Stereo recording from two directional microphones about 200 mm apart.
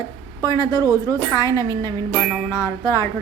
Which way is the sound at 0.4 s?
20° left (ahead or behind).